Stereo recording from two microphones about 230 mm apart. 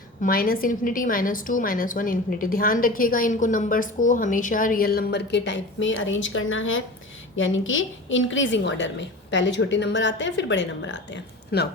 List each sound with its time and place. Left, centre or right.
0.2 s a woman's voice: left